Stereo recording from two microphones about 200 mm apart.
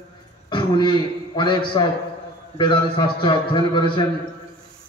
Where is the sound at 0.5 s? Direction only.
25° left (ahead or behind).